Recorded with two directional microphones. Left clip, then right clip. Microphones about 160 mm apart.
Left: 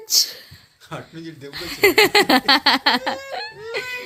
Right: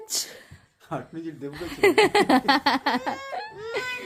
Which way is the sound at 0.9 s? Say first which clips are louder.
Right 1 dB; 55° right (ahead or behind).